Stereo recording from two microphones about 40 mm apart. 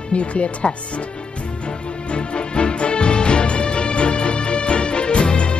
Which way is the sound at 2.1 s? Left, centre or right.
Left.